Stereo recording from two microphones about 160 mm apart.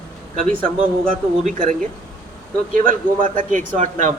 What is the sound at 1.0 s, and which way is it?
A man's voice, 60° right (ahead or behind).